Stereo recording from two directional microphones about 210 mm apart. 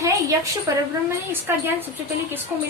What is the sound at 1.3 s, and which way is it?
Speech, 10° right (ahead or behind).